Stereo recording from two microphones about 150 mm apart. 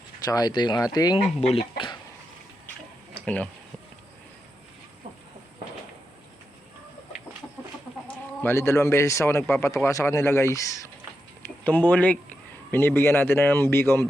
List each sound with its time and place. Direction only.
0.3 s speech: 25° left (ahead or behind)
1.4 s speech: 40° left (ahead or behind)
3.2 s speech: 10° left (ahead or behind)
8.4 s speech: 15° left (ahead or behind)